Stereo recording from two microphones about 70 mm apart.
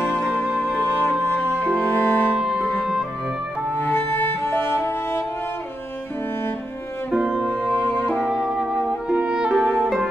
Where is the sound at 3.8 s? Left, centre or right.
Left.